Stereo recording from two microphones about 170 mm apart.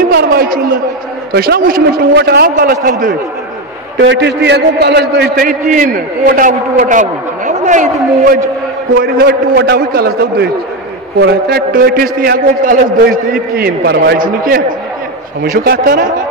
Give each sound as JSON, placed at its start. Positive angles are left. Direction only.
{"t": 0.1, "sound": "a sound", "side_deg": -65}
{"t": 1.3, "sound": "a man's voice", "side_deg": -65}
{"t": 3.9, "sound": "a man's voice", "side_deg": -90}
{"t": 5.7, "sound": "a man's voice", "side_deg": -50}
{"t": 8.9, "sound": "a man's voice", "side_deg": -60}